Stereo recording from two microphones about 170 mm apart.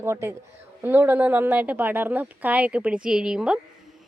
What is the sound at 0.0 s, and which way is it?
A woman's voice, 15° right (ahead or behind).